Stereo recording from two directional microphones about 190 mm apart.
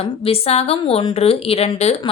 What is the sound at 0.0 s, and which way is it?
A woman's voice, 30° left (ahead or behind).